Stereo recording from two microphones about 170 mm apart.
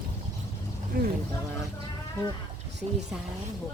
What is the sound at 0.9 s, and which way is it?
Speech, 60° right (ahead or behind).